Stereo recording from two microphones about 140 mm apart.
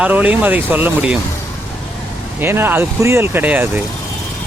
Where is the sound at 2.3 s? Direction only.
15° right (ahead or behind).